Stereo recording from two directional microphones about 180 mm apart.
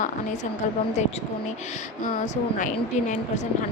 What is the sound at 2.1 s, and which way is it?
Speech, 45° left (ahead or behind).